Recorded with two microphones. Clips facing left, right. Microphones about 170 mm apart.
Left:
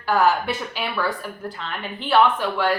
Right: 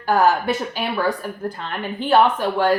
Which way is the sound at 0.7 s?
40° right (ahead or behind).